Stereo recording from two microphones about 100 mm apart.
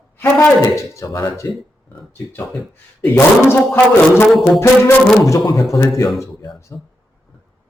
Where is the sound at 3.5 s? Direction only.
25° left (ahead or behind).